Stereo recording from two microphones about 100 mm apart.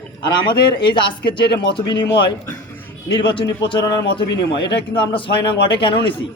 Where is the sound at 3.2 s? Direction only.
55° left (ahead or behind).